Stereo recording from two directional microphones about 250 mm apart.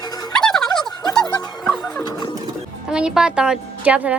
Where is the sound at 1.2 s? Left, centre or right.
Centre.